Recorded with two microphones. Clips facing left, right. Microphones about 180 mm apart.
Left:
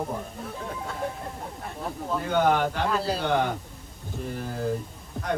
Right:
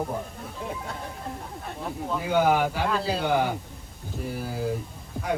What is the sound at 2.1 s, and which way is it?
A man's voice, 5° right (ahead or behind).